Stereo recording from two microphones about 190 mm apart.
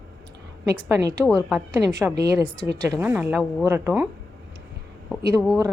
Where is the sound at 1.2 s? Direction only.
5° right (ahead or behind).